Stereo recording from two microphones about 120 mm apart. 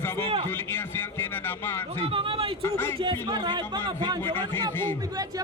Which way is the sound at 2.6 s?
20° left (ahead or behind).